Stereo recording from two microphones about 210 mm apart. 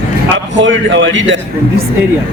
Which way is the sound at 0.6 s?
65° right (ahead or behind).